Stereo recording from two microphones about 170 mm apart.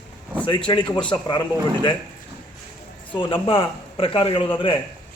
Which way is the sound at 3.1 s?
30° left (ahead or behind).